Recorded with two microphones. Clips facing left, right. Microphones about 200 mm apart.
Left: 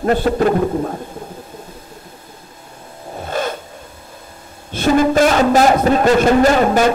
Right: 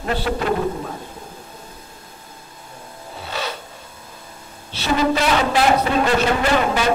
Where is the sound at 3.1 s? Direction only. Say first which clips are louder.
Left 7 dB; 50° left (ahead or behind).